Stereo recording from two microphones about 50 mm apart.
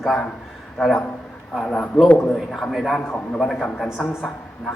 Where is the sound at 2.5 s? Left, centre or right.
Centre.